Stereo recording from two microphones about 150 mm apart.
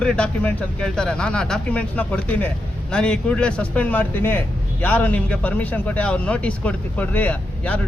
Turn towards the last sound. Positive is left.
turn(degrees=10)  # may be behind; listen again after turning